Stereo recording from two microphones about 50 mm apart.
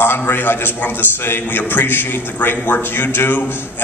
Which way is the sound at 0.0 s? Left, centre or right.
Left.